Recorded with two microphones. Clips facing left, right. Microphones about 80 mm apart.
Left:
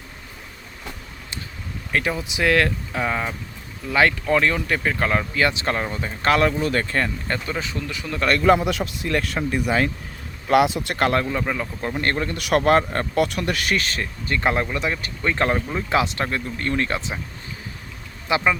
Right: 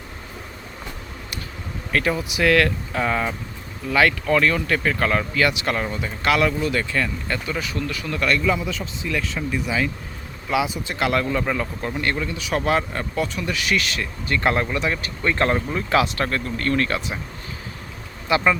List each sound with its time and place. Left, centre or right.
1.9 s speech: centre
2.9 s speech: centre
3.9 s speech: left
7.5 s speech: left
8.4 s speech: left
10.5 s speech: left
10.9 s speech: left
11.3 s speech: centre
11.9 s speech: left
12.4 s speech: left
14.4 s speech: centre
18.3 s speech: left